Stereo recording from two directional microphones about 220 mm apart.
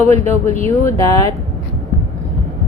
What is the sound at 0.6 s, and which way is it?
Speech, 15° left (ahead or behind).